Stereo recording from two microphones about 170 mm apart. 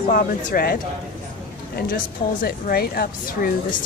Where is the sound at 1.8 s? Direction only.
60° left (ahead or behind).